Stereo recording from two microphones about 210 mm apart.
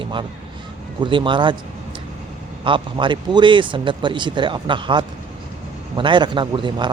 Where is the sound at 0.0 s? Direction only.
25° right (ahead or behind).